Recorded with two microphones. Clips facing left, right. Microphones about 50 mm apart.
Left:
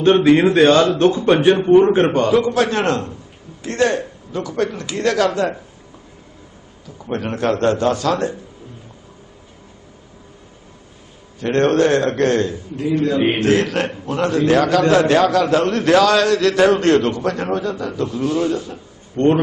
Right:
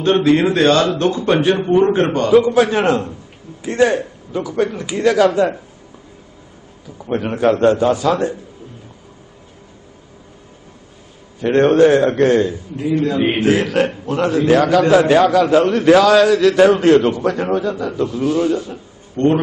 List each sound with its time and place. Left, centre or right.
0.0 s a man's voice: centre
0.4 s speech: centre
2.3 s a man's voice: centre
7.0 s a man's voice: centre
11.3 s a man's voice: centre